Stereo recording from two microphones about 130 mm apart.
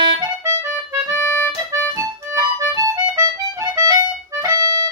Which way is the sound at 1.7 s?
25° right (ahead or behind).